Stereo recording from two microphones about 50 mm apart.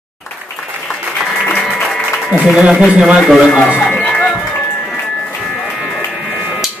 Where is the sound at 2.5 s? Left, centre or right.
Centre.